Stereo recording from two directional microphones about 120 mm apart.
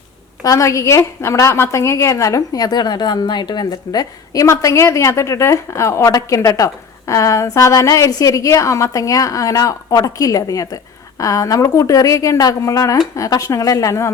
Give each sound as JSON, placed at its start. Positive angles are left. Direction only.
{"t": 0.4, "sound": "a woman's voice", "side_deg": 30}